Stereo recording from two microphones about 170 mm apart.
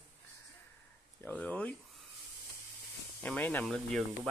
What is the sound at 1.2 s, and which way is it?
Speech, 5° left (ahead or behind).